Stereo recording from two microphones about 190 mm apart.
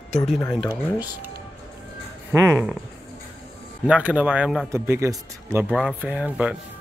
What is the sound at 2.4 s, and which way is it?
Speech, 10° right (ahead or behind).